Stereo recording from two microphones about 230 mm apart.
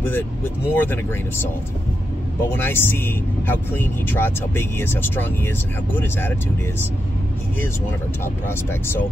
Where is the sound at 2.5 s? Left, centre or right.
Centre.